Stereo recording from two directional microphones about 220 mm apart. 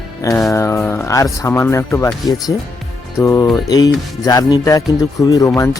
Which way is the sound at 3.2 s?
15° left (ahead or behind).